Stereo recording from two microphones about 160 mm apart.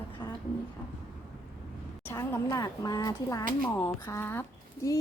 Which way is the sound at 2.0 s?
15° left (ahead or behind).